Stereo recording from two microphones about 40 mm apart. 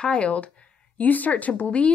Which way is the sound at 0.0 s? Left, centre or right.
Left.